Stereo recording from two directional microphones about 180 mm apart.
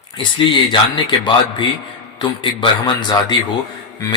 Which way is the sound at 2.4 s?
25° left (ahead or behind).